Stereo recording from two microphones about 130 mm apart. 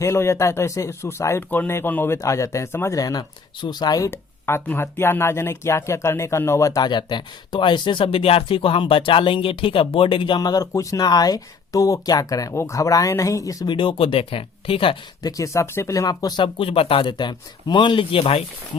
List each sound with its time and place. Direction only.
0.0 s speech: 20° left (ahead or behind)
4.1 s speech: 15° left (ahead or behind)
13.7 s speech: 45° left (ahead or behind)
15.2 s speech: 25° left (ahead or behind); by 18.4 s 45° left (ahead or behind)